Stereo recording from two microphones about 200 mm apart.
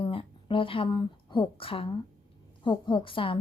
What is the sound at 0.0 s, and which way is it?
A woman's voice, 25° left (ahead or behind).